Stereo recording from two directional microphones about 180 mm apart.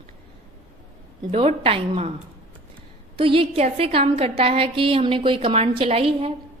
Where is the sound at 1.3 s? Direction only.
35° right (ahead or behind).